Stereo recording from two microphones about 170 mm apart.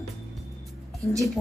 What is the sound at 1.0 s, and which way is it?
Speech, 20° right (ahead or behind).